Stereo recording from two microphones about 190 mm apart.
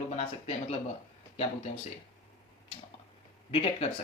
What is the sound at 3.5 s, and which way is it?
Speech, 30° left (ahead or behind).